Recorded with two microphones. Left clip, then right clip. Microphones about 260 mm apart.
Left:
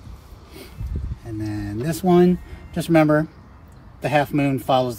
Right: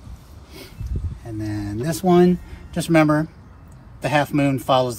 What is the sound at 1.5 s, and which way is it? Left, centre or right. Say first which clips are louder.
Speech: right 2 dB; centre.